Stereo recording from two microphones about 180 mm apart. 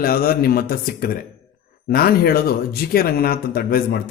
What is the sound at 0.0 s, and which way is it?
Speech, 55° left (ahead or behind).